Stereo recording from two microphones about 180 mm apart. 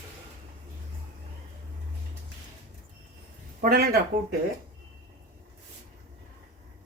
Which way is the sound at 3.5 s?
55° right (ahead or behind).